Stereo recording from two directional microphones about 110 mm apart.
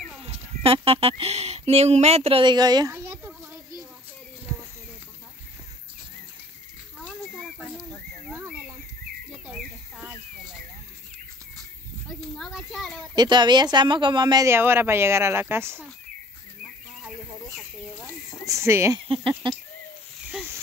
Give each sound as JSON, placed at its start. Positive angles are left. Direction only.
{"t": 0.3, "sound": "speech", "side_deg": -60}
{"t": 2.4, "sound": "speech", "side_deg": -40}
{"t": 2.9, "sound": "a sound", "side_deg": -25}
{"t": 9.3, "sound": "bird", "side_deg": -5}
{"t": 12.4, "sound": "children playing", "side_deg": 0}
{"t": 13.1, "sound": "speech", "side_deg": -40}
{"t": 14.5, "sound": "speech", "side_deg": -20}
{"t": 18.5, "sound": "speech", "side_deg": -25}
{"t": 19.0, "sound": "speech", "side_deg": -55}